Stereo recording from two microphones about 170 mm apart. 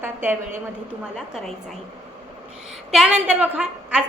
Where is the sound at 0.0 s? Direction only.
10° right (ahead or behind).